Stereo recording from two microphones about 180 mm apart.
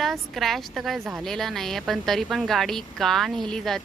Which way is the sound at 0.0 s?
Centre (ahead or behind).